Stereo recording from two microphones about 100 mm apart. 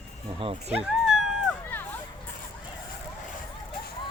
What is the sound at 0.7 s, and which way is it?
Cat, 5° right (ahead or behind).